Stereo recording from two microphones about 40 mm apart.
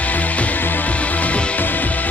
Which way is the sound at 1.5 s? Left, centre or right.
Left.